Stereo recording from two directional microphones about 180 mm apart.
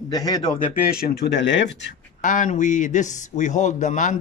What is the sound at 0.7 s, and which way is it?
Speech, 60° left (ahead or behind).